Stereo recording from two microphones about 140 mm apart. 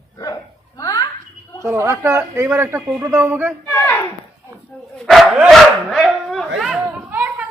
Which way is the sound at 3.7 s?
15° left (ahead or behind).